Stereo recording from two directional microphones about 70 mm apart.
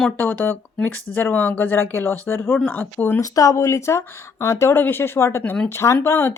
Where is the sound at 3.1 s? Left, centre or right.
Left.